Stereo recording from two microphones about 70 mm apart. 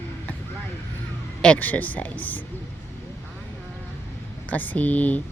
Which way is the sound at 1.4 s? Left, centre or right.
Centre.